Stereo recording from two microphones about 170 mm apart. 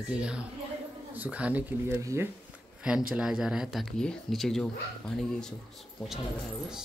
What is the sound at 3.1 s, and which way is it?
Speech, 5° right (ahead or behind).